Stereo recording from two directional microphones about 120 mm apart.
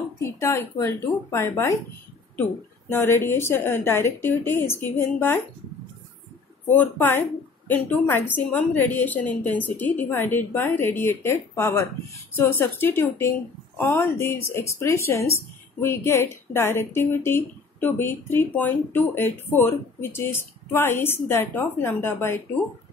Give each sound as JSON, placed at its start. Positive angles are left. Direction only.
{"t": 0.2, "sound": "a woman's voice", "side_deg": 25}
{"t": 2.9, "sound": "a woman's voice", "side_deg": 20}
{"t": 6.7, "sound": "a woman's voice", "side_deg": 15}